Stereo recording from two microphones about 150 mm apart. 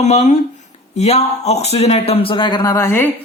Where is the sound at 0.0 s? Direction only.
50° left (ahead or behind); by 3.1 s 15° left (ahead or behind).